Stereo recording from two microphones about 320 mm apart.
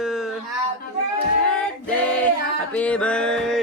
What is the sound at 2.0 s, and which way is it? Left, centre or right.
Speech, centre.